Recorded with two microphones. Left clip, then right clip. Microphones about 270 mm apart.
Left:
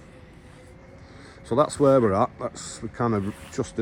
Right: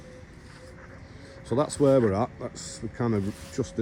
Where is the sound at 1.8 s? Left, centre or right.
Left.